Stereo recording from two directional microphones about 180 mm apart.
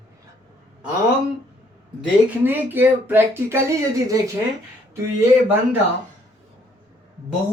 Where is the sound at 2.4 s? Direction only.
10° right (ahead or behind).